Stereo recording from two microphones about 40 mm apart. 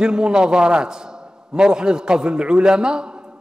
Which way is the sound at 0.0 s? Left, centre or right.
Centre.